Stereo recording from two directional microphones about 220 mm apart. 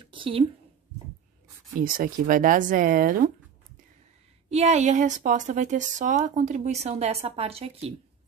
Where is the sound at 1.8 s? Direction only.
40° right (ahead or behind).